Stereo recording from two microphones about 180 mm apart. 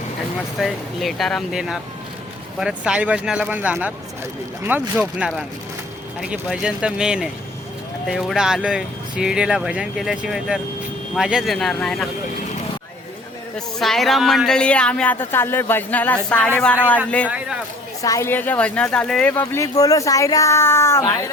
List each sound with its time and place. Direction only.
0.6 s speech: centre (ahead or behind)
13.7 s speech: centre (ahead or behind)
17.2 s speech: 5° right (ahead or behind)
18.0 s speech: 15° left (ahead or behind)
19.4 s speech: 15° left (ahead or behind)